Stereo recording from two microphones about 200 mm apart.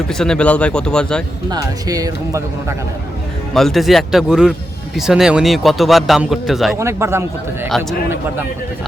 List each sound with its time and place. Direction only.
0.1 s a man's voice: 5° left (ahead or behind)
1.5 s speech: 20° right (ahead or behind)
3.5 s a man's voice: centre (ahead or behind)
6.7 s speech: 15° right (ahead or behind)